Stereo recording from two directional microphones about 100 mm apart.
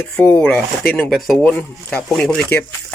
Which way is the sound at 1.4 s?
10° left (ahead or behind).